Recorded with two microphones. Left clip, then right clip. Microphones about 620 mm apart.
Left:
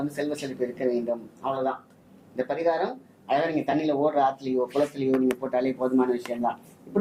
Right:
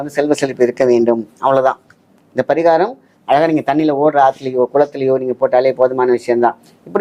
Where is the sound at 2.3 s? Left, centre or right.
Right.